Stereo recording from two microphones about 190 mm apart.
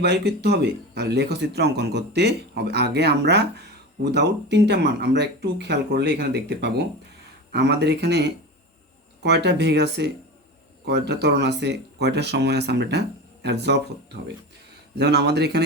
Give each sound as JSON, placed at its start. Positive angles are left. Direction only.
{"t": 0.0, "sound": "speech", "side_deg": -60}
{"t": 14.9, "sound": "speech", "side_deg": -60}